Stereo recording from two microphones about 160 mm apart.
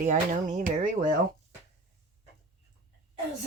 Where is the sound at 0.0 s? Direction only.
50° right (ahead or behind).